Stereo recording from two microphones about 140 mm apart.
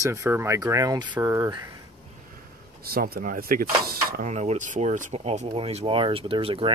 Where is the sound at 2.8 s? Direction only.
90° right.